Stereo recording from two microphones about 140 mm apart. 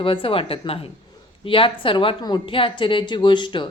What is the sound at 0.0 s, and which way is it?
Speech, 40° left (ahead or behind).